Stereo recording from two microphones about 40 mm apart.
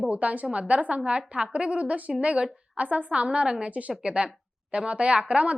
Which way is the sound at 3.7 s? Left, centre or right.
Right.